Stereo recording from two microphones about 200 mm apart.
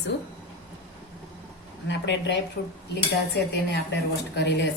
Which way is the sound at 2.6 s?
45° left (ahead or behind).